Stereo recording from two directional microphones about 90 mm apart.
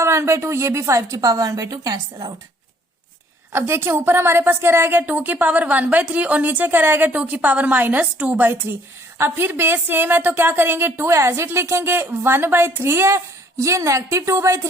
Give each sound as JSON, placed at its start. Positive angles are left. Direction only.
{"t": 0.0, "sound": "a woman's voice", "side_deg": -30}
{"t": 3.5, "sound": "a woman's voice", "side_deg": -30}